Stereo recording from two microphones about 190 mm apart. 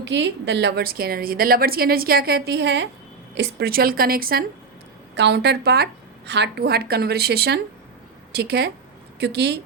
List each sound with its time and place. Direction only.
0.0 s a woman's voice: 70° right (ahead or behind); by 4.4 s 50° right (ahead or behind)
5.1 s a woman's voice: 65° right (ahead or behind)